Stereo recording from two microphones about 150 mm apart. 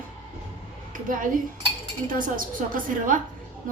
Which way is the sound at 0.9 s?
65° right (ahead or behind).